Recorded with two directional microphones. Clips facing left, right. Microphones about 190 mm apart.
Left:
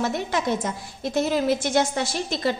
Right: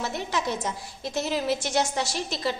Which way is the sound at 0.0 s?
50° left (ahead or behind).